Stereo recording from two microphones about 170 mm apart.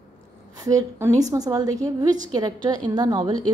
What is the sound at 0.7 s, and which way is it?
A woman's voice, 20° right (ahead or behind).